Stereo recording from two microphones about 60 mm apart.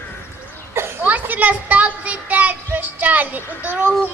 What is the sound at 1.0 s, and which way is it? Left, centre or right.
A woman's voice, right.